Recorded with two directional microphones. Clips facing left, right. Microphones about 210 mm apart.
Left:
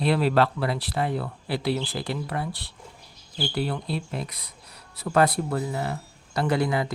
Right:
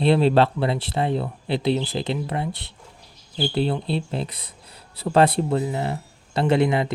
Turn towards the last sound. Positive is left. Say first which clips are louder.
# right 5 dB
turn(degrees=-25)  # may be behind; listen again after turning